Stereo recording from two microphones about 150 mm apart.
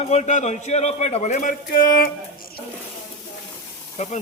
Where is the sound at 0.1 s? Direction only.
50° left (ahead or behind); by 2.0 s 70° left (ahead or behind).